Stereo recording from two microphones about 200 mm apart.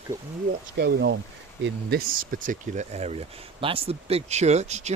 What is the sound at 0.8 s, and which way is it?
Speech, 60° right (ahead or behind).